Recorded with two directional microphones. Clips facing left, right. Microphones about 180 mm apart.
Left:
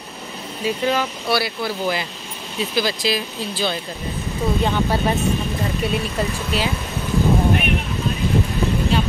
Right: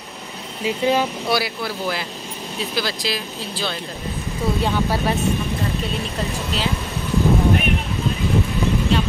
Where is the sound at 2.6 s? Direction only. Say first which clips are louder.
Left 4 dB; centre (ahead or behind).